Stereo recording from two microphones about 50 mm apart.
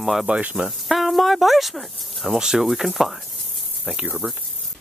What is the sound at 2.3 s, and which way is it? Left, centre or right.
Speech, centre.